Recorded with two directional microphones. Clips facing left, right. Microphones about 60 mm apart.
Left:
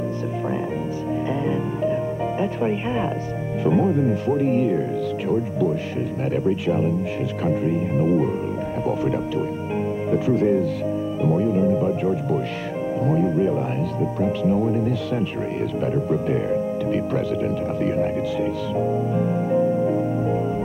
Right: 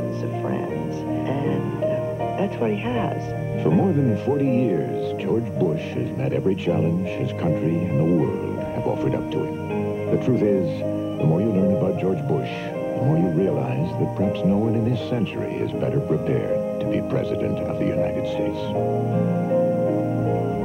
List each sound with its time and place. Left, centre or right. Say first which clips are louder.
1.8 s music: even; left
3.6 s speech: even; left
4.4 s speech: even; left
6.3 s speech: even; left
8.0 s speech: even; left
10.1 s speech: even; centre
11.2 s speech: even; left
15.8 s speech: even; left